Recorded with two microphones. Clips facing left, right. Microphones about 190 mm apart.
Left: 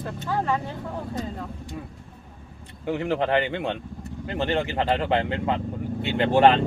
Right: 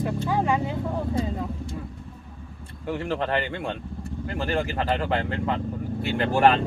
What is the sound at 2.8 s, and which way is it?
Speech, 15° left (ahead or behind).